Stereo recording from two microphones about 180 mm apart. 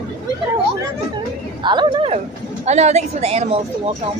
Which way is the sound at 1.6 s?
25° right (ahead or behind).